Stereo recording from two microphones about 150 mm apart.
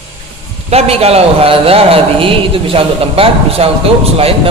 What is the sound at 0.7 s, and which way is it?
A man's voice, 45° right (ahead or behind).